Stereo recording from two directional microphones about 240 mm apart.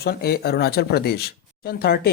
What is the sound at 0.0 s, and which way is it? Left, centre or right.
Speech, left.